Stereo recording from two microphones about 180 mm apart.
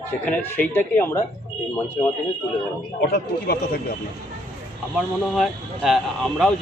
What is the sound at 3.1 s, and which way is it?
Speech, 60° left (ahead or behind).